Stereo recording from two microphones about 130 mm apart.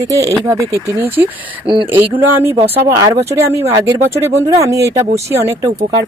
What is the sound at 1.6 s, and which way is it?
Speech, 40° right (ahead or behind).